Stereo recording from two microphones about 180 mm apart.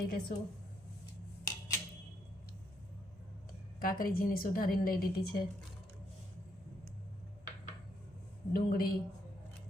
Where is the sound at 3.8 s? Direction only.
55° left (ahead or behind).